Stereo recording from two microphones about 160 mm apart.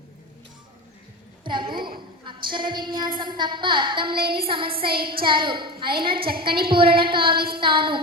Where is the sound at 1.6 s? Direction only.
65° right (ahead or behind).